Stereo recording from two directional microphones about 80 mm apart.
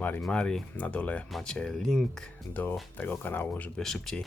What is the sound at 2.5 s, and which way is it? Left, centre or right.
Speech, left.